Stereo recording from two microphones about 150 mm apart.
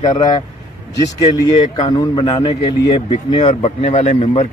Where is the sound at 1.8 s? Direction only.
30° left (ahead or behind); by 4.4 s 50° left (ahead or behind).